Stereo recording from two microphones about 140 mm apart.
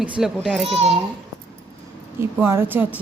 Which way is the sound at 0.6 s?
45° right (ahead or behind).